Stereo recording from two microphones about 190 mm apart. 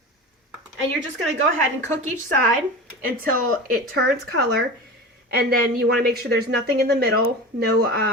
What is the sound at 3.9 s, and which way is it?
Speech, 55° right (ahead or behind).